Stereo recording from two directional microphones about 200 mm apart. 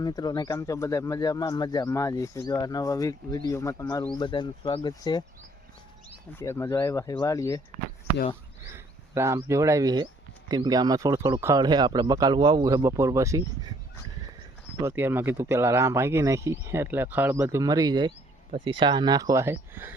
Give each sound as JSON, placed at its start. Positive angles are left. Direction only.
{"t": 0.0, "sound": "speech", "side_deg": 20}
{"t": 6.4, "sound": "speech", "side_deg": 15}
{"t": 8.7, "sound": "a man's voice", "side_deg": -15}
{"t": 14.8, "sound": "a man's voice", "side_deg": -10}